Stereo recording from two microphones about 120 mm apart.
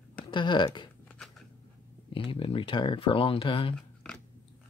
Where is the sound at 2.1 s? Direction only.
45° left (ahead or behind).